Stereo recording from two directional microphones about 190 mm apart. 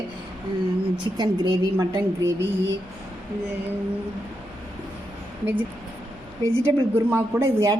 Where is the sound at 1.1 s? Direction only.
20° right (ahead or behind).